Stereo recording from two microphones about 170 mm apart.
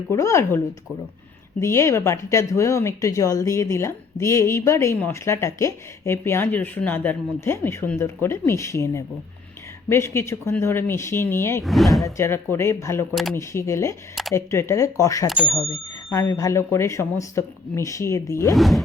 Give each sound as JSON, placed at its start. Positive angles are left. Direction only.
{"t": 0.1, "sound": "speech", "side_deg": 15}
{"t": 1.6, "sound": "speech", "side_deg": 15}
{"t": 11.6, "sound": "speech", "side_deg": 0}
{"t": 12.1, "sound": "speech", "side_deg": 15}
{"t": 18.5, "sound": "speech", "side_deg": 0}